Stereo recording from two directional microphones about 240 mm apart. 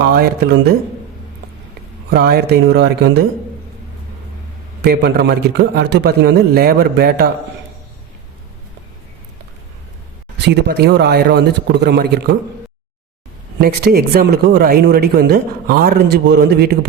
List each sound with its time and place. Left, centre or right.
0.0 s speech: right
2.0 s a man's voice: right
4.8 s a man's voice: right
10.4 s a man's voice: right
13.6 s speech: right